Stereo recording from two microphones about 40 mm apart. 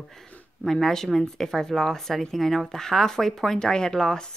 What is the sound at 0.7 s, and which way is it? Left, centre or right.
Speech, centre.